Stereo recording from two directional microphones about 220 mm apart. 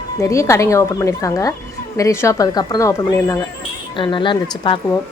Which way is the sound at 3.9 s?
20° left (ahead or behind).